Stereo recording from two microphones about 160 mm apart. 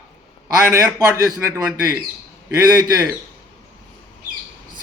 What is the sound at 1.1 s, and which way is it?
Speech, 20° right (ahead or behind).